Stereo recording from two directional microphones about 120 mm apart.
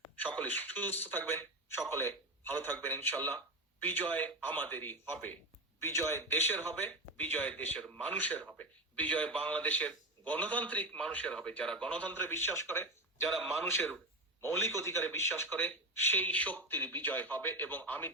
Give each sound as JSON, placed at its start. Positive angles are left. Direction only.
{"t": 0.2, "sound": "a man's voice", "side_deg": 15}
{"t": 13.2, "sound": "a man's voice", "side_deg": 0}
{"t": 14.4, "sound": "a man's voice", "side_deg": 20}